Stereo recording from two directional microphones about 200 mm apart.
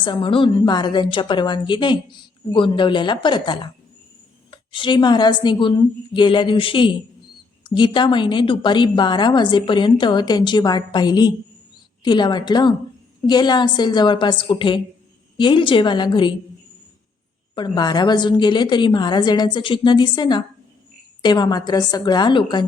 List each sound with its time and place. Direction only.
0.0 s a woman's voice: 25° left (ahead or behind)
17.5 s a woman's voice: 20° left (ahead or behind)